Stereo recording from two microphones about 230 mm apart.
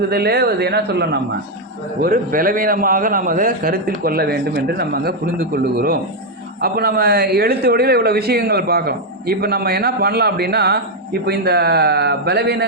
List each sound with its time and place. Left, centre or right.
0.1 s a man's voice: right